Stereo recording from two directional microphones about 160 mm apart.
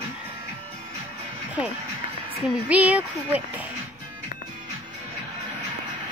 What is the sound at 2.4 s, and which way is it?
A child's voice, 10° right (ahead or behind).